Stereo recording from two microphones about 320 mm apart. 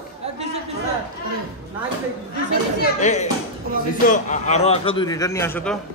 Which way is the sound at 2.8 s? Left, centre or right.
Left.